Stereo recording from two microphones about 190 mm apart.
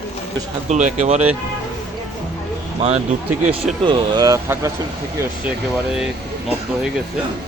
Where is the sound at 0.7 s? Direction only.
40° right (ahead or behind).